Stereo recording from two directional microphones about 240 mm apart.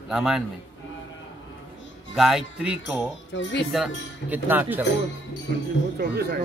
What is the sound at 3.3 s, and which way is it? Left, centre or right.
Speech, left.